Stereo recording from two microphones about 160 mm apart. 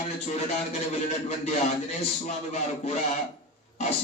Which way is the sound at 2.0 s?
45° left (ahead or behind).